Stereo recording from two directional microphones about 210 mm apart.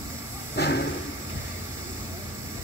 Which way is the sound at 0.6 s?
50° left (ahead or behind).